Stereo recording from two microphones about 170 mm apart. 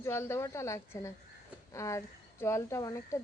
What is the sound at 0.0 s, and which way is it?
A woman's voice, 15° left (ahead or behind).